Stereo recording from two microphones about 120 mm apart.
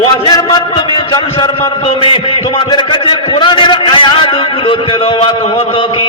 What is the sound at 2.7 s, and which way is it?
A man's voice, 40° left (ahead or behind).